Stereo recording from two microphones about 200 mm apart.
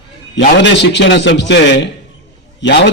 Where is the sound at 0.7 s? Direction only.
60° left (ahead or behind).